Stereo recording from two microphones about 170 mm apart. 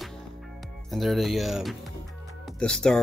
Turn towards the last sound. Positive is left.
turn(degrees=5)  # may be behind; listen again after turning